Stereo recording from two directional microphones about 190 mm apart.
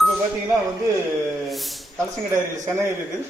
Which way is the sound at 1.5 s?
Centre (ahead or behind).